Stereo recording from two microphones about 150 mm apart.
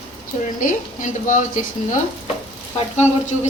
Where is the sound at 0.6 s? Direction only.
60° left (ahead or behind).